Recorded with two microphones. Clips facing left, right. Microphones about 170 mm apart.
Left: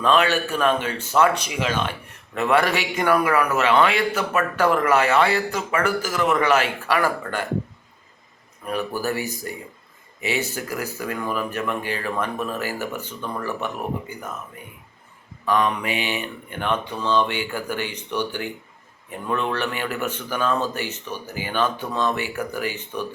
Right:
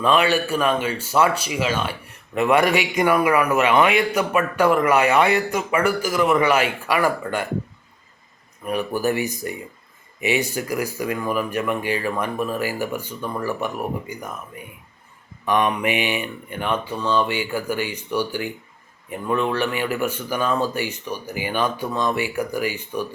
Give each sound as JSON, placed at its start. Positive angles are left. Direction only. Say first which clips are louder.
{"t": 0.0, "sound": "speech", "louder": "right 1 dB", "side_deg": -10}
{"t": 8.6, "sound": "speech", "louder": "right 3 dB", "side_deg": -15}
{"t": 15.4, "sound": "speech", "louder": "right 2 dB", "side_deg": -20}